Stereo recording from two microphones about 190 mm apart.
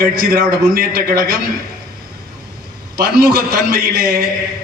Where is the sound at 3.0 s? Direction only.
55° right (ahead or behind).